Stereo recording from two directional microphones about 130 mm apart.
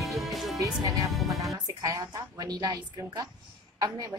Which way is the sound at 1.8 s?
30° right (ahead or behind).